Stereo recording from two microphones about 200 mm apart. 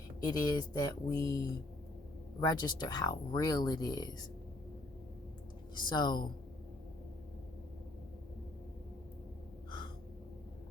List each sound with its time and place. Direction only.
0.2 s speech: 20° left (ahead or behind)
5.9 s speech: 20° left (ahead or behind)